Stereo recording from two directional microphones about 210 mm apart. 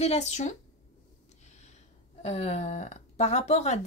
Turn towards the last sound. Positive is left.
turn(degrees=30)  # may be behind; listen again after turning